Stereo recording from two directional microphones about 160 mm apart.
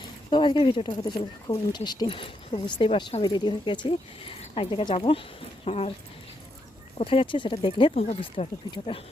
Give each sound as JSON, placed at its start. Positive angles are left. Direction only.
{"t": 0.0, "sound": "speech", "side_deg": 30}
{"t": 7.0, "sound": "speech", "side_deg": 35}